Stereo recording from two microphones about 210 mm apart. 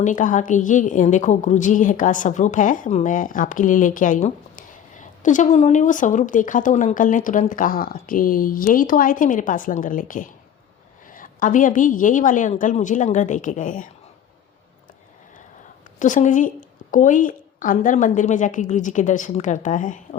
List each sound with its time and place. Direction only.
0.0 s a woman's voice: 40° left (ahead or behind)
16.0 s a woman's voice: 35° left (ahead or behind)